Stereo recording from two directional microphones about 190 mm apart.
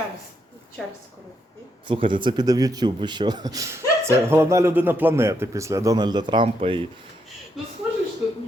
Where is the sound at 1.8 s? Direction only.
25° right (ahead or behind).